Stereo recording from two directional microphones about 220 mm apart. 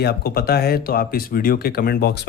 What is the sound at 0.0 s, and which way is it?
Speech, 45° left (ahead or behind).